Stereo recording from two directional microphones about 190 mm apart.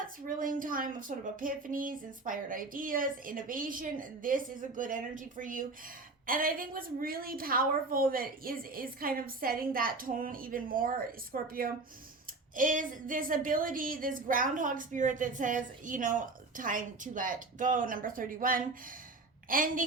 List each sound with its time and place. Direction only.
0.3 s a woman's voice: 45° right (ahead or behind)